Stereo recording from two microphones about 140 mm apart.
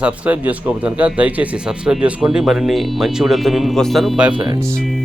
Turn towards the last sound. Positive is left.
turn(degrees=0)  # may be behind; listen again after turning